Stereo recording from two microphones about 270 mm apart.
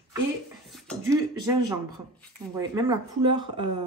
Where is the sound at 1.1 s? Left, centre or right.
Centre.